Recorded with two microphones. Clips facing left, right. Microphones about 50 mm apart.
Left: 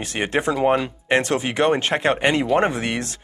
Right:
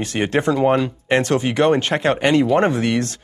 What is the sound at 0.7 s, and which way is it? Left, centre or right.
Speech, centre.